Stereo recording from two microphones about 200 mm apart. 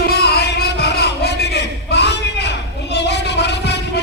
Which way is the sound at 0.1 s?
55° left (ahead or behind).